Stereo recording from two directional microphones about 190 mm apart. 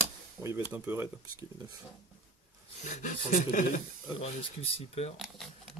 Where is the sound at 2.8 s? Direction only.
40° left (ahead or behind).